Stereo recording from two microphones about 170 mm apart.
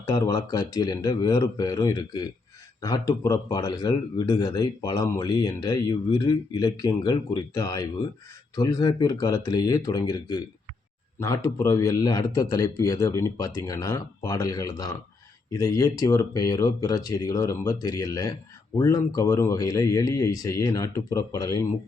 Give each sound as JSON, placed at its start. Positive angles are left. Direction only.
{"t": 0.0, "sound": "a man's voice", "side_deg": 20}